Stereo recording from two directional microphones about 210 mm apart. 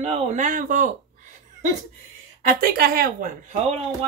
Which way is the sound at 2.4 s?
40° right (ahead or behind).